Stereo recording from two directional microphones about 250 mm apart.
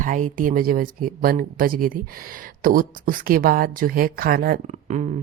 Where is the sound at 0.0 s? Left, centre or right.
Right.